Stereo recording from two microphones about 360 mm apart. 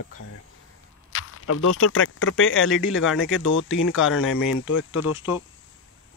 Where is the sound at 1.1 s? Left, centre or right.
Left.